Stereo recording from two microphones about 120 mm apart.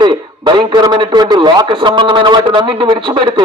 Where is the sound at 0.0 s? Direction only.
40° right (ahead or behind).